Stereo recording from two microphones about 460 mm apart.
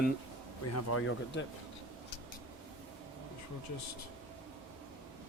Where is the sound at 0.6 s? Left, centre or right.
Left.